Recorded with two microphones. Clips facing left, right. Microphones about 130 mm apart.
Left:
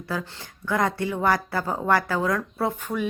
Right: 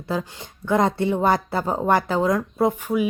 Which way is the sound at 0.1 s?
20° right (ahead or behind).